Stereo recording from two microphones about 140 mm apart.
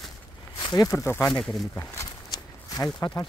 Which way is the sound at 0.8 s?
20° left (ahead or behind).